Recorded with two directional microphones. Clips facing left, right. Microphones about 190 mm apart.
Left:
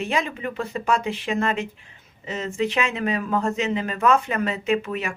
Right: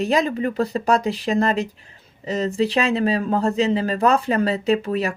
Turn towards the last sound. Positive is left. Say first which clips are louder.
# right 4 dB
turn(degrees=-35)  # may be behind; listen again after turning